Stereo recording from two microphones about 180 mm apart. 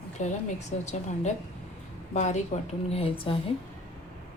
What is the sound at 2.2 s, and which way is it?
A woman's voice, 40° left (ahead or behind).